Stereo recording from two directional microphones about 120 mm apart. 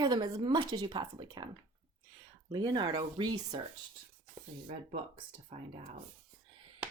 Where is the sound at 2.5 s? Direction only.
40° right (ahead or behind).